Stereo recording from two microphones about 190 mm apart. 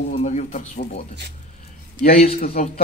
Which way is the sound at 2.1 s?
35° left (ahead or behind).